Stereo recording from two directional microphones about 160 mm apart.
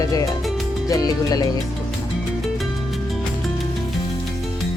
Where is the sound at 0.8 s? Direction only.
20° left (ahead or behind).